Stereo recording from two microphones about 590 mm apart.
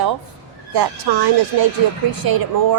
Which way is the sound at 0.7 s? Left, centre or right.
Right.